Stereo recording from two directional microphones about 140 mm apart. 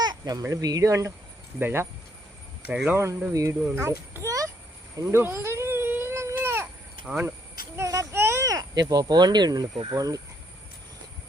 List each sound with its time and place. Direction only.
0.0 s a sound: 30° right (ahead or behind)
0.4 s speech: 25° right (ahead or behind)
4.1 s a sound: 20° right (ahead or behind)
4.9 s speech: 25° right (ahead or behind)
5.2 s baby cry: 20° right (ahead or behind)
7.0 s speech: 5° right (ahead or behind)
7.8 s speech: 20° right (ahead or behind)